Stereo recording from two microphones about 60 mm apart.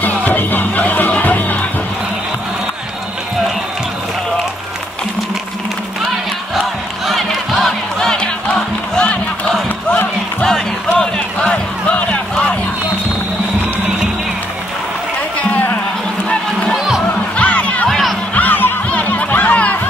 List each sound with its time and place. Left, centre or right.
0.0 s music: left
7.1 s music: centre
10.4 s music: centre
16.7 s music: centre
17.4 s music: left
17.8 s music: centre
18.3 s music: left